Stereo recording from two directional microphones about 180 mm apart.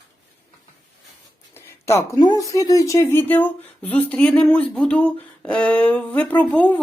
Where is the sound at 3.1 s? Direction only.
10° left (ahead or behind).